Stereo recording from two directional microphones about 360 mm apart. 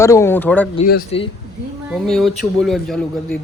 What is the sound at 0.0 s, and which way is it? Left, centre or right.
Speech, centre.